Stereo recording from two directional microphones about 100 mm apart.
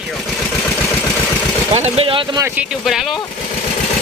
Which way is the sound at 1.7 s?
75° right (ahead or behind).